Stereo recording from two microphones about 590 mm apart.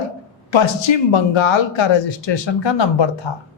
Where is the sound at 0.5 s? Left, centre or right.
Left.